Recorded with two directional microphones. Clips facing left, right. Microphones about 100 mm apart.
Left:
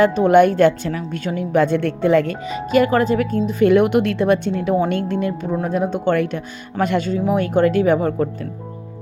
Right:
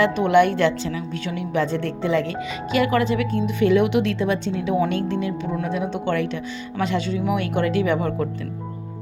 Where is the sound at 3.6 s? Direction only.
50° left (ahead or behind).